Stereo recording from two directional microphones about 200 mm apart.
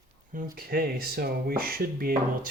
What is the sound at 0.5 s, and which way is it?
Speech, 50° right (ahead or behind).